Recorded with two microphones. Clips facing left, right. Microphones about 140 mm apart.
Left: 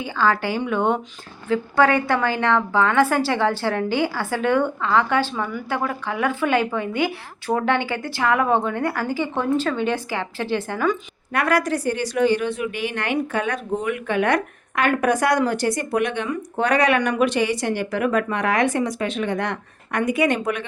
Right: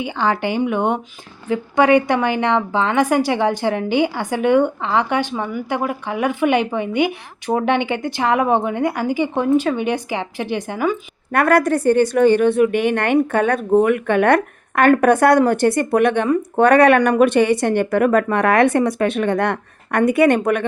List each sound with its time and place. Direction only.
0.0 s a woman's voice: 20° right (ahead or behind)
11.3 s a woman's voice: 55° right (ahead or behind)